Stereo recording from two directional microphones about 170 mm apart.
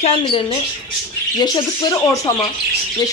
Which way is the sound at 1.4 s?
25° left (ahead or behind).